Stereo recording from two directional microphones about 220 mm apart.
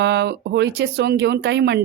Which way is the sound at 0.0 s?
50° right (ahead or behind).